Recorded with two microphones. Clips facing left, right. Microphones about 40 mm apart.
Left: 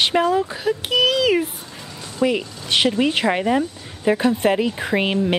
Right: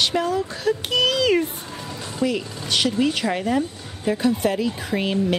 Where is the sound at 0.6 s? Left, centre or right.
Centre.